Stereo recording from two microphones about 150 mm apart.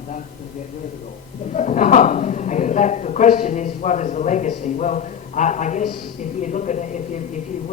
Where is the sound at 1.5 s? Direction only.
50° left (ahead or behind).